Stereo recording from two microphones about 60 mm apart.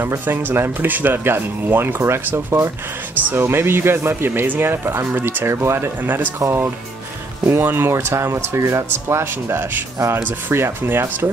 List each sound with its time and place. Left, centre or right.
0.0 s speech: right
7.4 s speech: right
7.9 s speech: right